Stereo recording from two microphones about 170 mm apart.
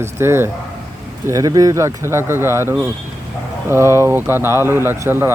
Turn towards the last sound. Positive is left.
turn(degrees=-15)  # may be behind; listen again after turning